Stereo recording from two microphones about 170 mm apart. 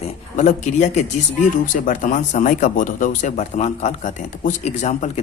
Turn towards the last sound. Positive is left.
turn(degrees=40)  # may be behind; listen again after turning